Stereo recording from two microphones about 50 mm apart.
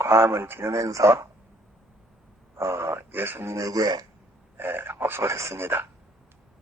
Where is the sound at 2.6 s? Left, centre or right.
Right.